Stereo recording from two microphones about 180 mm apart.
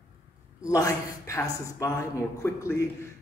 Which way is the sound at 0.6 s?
20° left (ahead or behind).